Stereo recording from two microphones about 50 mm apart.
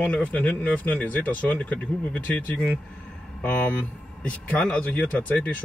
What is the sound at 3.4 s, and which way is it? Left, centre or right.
Speech, left.